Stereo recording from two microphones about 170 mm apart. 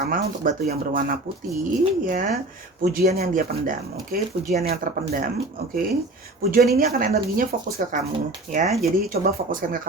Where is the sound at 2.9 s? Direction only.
65° right (ahead or behind).